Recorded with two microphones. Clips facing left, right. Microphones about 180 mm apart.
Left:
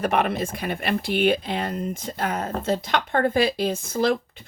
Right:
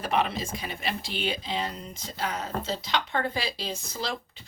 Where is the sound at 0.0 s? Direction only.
55° left (ahead or behind).